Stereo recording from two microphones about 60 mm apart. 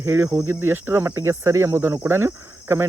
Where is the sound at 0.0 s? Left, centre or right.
Right.